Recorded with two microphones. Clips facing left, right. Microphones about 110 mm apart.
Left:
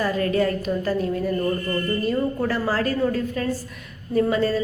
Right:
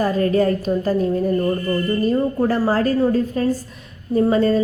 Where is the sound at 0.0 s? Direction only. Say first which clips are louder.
Right 4 dB; 35° right (ahead or behind).